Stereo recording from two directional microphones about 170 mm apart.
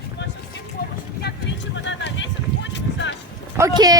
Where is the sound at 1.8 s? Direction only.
90° left.